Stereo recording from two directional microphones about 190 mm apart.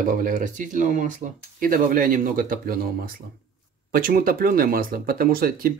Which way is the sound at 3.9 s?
50° right (ahead or behind).